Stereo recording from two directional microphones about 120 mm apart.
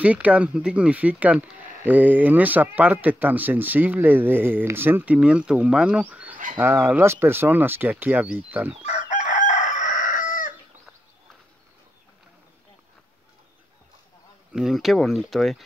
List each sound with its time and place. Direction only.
0.0 s speech: 10° right (ahead or behind)
8.8 s chicken: 90° left
14.5 s speech: 5° right (ahead or behind)